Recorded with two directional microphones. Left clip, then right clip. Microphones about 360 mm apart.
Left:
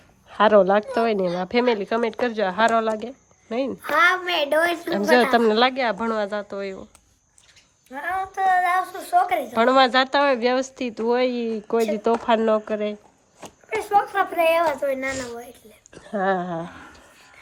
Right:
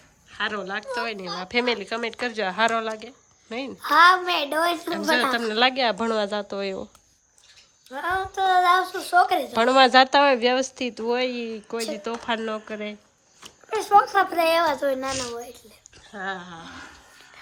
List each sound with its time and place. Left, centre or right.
0.3 s a woman's voice: centre
3.8 s speech: centre
4.9 s a woman's voice: centre
7.9 s a woman's voice: centre
13.7 s speech: centre
15.1 s a woman's voice: centre
16.0 s speech: centre